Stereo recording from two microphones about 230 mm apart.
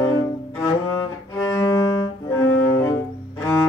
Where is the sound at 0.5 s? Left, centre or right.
Centre.